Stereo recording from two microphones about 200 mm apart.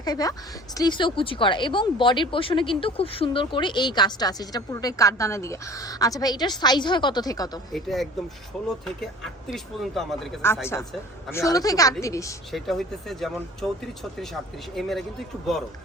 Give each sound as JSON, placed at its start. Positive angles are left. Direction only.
{"t": 0.0, "sound": "a woman's voice", "side_deg": 20}
{"t": 7.7, "sound": "speech", "side_deg": 0}
{"t": 10.7, "sound": "speech", "side_deg": 15}
{"t": 12.5, "sound": "speech", "side_deg": 0}